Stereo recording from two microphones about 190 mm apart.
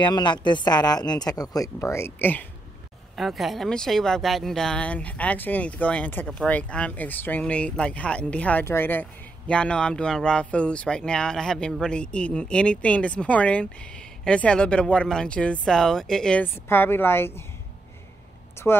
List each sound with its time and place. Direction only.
0.0 s speech: 25° left (ahead or behind)
3.2 s speech: centre (ahead or behind)
18.6 s a woman's voice: 15° left (ahead or behind)